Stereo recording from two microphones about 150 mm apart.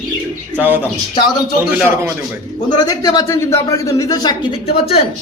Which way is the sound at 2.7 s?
25° left (ahead or behind).